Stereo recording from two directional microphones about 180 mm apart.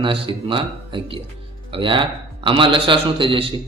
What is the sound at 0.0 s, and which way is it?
A man's voice, 30° right (ahead or behind).